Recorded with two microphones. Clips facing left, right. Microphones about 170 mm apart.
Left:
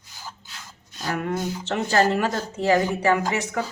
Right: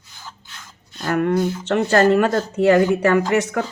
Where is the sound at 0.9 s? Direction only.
55° right (ahead or behind).